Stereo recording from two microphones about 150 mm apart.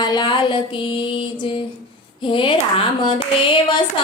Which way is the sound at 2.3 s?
35° left (ahead or behind).